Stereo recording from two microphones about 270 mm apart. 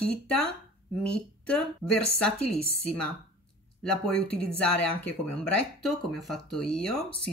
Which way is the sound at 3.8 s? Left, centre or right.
Centre.